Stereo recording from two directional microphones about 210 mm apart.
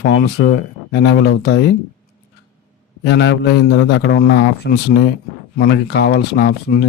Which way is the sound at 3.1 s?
55° left (ahead or behind).